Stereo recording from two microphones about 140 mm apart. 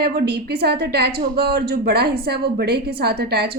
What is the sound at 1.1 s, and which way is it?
A woman's voice, 90° right.